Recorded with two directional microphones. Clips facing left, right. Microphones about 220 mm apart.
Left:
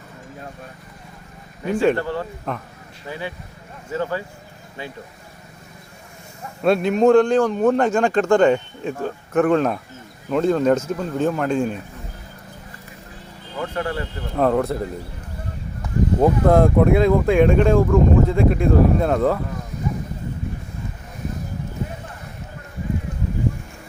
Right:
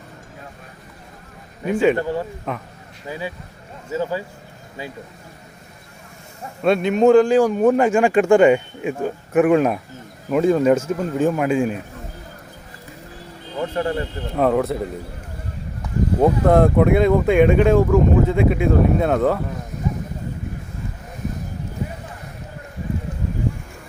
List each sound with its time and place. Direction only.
1.6 s speech: 5° right (ahead or behind)
3.9 s speech: 10° right (ahead or behind)
6.6 s speech: centre (ahead or behind)
13.6 s speech: 25° right (ahead or behind)
14.3 s speech: 5° right (ahead or behind)
16.2 s speech: centre (ahead or behind)